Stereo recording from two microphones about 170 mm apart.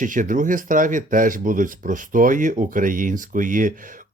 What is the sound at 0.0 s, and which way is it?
Speech, 50° right (ahead or behind).